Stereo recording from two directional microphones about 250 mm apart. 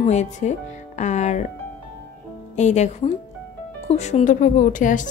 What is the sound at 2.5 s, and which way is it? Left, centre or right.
A woman's voice, left.